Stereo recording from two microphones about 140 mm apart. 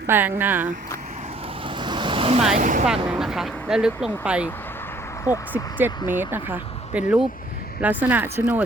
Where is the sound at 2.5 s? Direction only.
65° right (ahead or behind).